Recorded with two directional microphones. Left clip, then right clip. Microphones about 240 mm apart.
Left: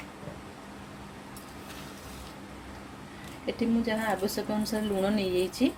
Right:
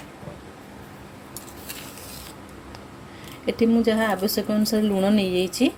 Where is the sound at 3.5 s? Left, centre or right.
Right.